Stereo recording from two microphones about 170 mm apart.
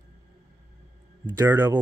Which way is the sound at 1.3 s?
10° right (ahead or behind).